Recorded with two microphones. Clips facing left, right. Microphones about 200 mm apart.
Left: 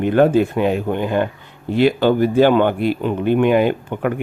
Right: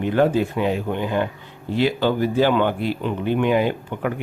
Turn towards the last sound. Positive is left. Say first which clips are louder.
# left 4 dB
turn(degrees=55)  # may be behind; listen again after turning